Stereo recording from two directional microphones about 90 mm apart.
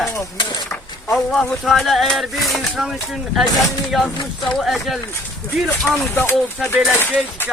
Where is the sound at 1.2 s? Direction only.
5° left (ahead or behind).